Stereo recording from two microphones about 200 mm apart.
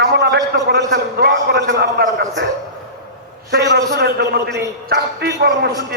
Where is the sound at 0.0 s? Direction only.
55° right (ahead or behind).